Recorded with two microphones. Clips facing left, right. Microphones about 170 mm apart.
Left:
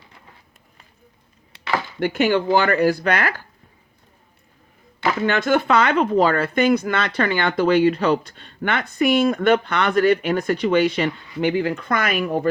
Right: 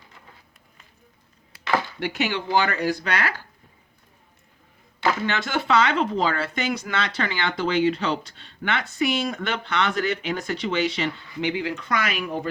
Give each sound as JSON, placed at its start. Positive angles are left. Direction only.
{"t": 2.0, "sound": "speech", "side_deg": 50}
{"t": 5.2, "sound": "speech", "side_deg": 55}